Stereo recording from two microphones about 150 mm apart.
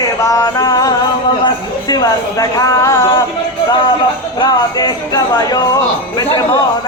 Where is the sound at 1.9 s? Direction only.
25° left (ahead or behind).